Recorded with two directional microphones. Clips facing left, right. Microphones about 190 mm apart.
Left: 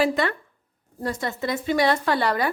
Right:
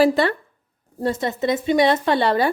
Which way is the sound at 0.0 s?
30° right (ahead or behind).